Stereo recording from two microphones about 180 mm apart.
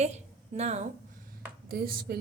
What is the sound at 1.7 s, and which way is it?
Speech, 55° right (ahead or behind).